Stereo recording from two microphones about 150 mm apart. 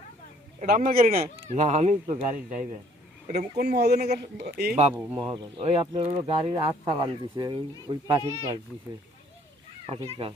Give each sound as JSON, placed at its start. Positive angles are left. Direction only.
{"t": 0.6, "sound": "a man's voice", "side_deg": -70}
{"t": 1.5, "sound": "speech", "side_deg": -50}
{"t": 3.6, "sound": "speech", "side_deg": -90}
{"t": 5.2, "sound": "speech", "side_deg": -30}
{"t": 9.8, "sound": "speech", "side_deg": -40}